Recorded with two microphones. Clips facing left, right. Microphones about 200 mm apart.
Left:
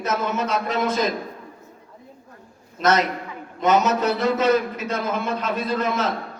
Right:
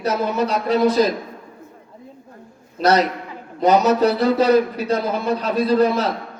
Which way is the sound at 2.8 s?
35° right (ahead or behind).